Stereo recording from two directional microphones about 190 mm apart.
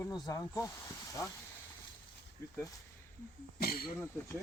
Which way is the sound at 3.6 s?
50° left (ahead or behind).